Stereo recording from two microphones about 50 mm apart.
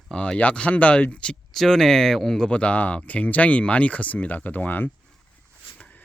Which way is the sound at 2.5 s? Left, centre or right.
Left.